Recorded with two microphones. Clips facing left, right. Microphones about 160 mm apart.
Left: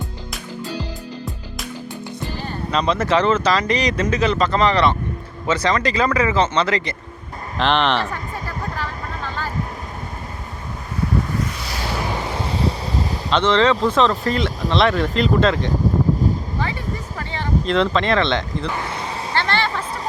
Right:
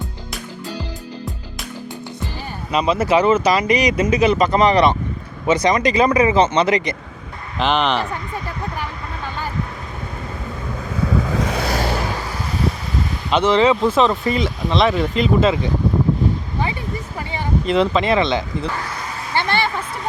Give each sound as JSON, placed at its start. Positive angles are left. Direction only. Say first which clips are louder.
{"t": 2.7, "sound": "speech", "louder": "right 2 dB", "side_deg": -10}
{"t": 7.6, "sound": "speech", "louder": "even", "side_deg": 0}
{"t": 8.7, "sound": "vehicle", "louder": "even", "side_deg": -15}
{"t": 11.3, "sound": "vehicle", "louder": "right 4 dB", "side_deg": -90}
{"t": 11.6, "sound": "vehicle", "louder": "right 8 dB", "side_deg": -50}
{"t": 12.3, "sound": "wind noise", "louder": "left 1 dB", "side_deg": 30}
{"t": 13.3, "sound": "speech", "louder": "right 2 dB", "side_deg": -10}
{"t": 17.2, "sound": "speech", "louder": "right 1 dB", "side_deg": -10}
{"t": 19.3, "sound": "a sound", "louder": "right 2 dB", "side_deg": -15}